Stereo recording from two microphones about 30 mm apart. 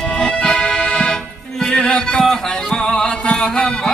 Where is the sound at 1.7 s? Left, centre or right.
Left.